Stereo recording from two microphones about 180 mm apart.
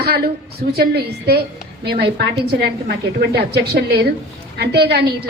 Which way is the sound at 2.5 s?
60° right (ahead or behind).